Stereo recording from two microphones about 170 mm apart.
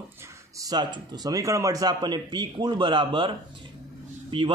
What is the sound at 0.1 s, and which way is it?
A man's voice, 15° right (ahead or behind).